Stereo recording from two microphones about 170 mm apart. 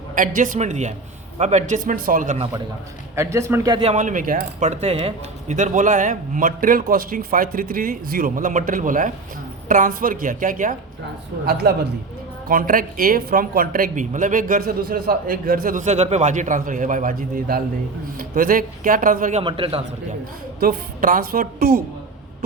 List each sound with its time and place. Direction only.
0.1 s speech: 50° right (ahead or behind)
3.2 s speech: 15° right (ahead or behind)
3.8 s speech: 40° right (ahead or behind)
11.6 s a woman's voice: 70° right (ahead or behind)
12.5 s speech: 55° right (ahead or behind)
19.4 s a man's voice: 30° right (ahead or behind)
20.6 s speech: 55° right (ahead or behind)